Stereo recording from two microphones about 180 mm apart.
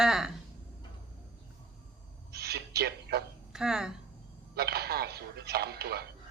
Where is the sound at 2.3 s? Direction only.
60° right (ahead or behind).